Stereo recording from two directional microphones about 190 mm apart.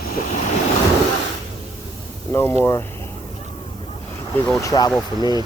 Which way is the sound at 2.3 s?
10° left (ahead or behind).